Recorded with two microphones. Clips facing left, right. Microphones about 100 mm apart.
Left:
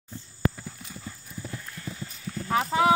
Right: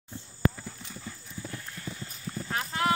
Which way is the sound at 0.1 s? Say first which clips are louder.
Even; centre (ahead or behind).